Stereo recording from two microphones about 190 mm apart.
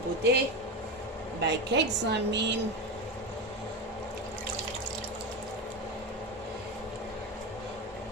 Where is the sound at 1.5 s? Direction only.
65° right (ahead or behind).